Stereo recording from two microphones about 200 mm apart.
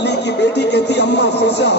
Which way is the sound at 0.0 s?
60° left (ahead or behind).